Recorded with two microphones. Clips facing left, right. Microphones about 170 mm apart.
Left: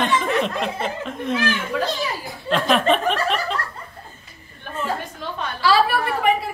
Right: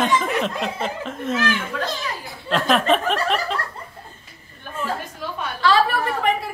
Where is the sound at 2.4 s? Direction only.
Centre (ahead or behind).